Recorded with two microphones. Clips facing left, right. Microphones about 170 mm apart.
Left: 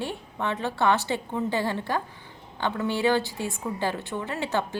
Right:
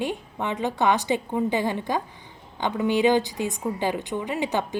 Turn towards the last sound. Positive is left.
turn(degrees=-15)  # may be behind; listen again after turning